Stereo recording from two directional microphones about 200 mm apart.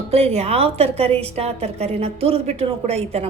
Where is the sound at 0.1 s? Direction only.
30° right (ahead or behind).